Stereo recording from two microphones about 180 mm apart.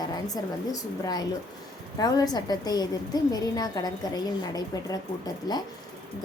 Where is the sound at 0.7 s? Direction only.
20° left (ahead or behind).